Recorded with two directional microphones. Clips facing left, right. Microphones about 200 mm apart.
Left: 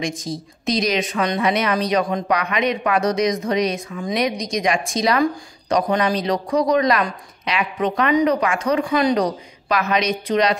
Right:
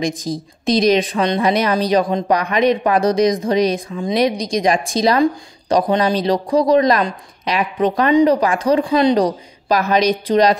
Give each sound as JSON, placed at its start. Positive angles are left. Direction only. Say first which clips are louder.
{"t": 0.0, "sound": "speech", "louder": "right 4 dB", "side_deg": -35}